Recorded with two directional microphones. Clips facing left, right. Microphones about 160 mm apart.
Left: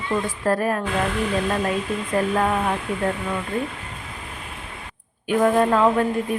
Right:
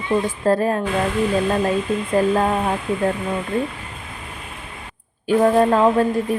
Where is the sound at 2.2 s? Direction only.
30° right (ahead or behind).